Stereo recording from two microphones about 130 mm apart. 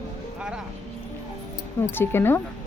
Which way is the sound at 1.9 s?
15° left (ahead or behind).